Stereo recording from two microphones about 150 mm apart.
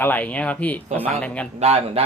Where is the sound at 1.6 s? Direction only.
45° right (ahead or behind).